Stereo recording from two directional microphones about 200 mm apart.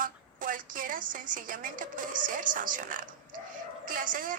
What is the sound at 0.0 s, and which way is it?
A woman's voice, 40° right (ahead or behind).